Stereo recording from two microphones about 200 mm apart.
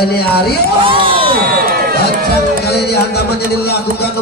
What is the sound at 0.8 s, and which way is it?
Speech, 25° right (ahead or behind).